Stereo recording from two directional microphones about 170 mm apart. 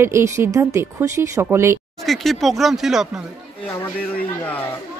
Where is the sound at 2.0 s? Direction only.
Centre (ahead or behind).